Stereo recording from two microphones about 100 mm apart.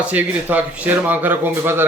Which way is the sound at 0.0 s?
15° right (ahead or behind).